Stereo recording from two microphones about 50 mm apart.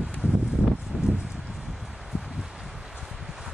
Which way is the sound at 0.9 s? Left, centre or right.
Right.